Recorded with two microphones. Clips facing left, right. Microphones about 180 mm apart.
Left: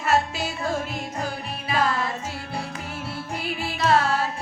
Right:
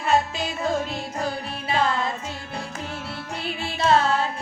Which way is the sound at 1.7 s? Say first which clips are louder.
Right 1 dB; 25° right (ahead or behind).